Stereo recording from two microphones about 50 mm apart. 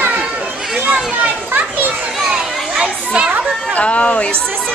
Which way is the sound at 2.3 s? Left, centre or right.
Centre.